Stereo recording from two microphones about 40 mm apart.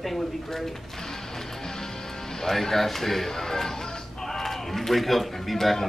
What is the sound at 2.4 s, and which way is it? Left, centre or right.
A woman's voice, centre.